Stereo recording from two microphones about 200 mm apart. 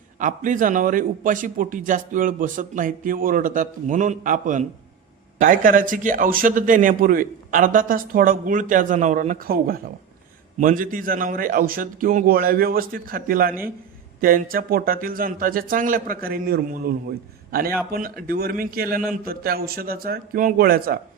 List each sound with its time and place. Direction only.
0.2 s a man's voice: 40° right (ahead or behind)